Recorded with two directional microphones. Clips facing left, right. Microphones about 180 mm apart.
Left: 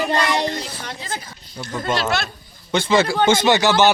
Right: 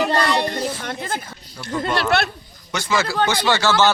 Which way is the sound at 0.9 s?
55° right (ahead or behind).